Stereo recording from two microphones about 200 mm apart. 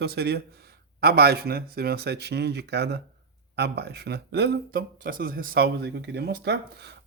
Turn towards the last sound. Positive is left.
turn(degrees=-55)  # may be behind; listen again after turning